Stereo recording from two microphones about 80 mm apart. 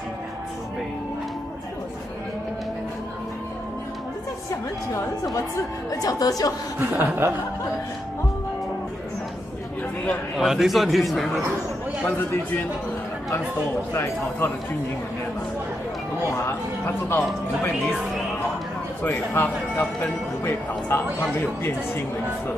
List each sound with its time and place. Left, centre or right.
4.9 s a woman's voice: left
6.8 s speech: right
10.3 s a man's voice: centre
12.0 s speech: left
13.9 s speech: left
16.3 s speech: left
19.0 s speech: left